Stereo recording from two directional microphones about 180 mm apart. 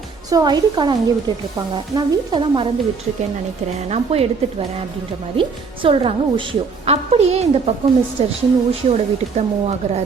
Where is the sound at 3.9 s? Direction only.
35° right (ahead or behind).